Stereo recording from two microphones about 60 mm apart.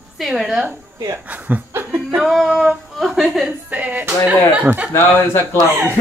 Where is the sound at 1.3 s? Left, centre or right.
Right.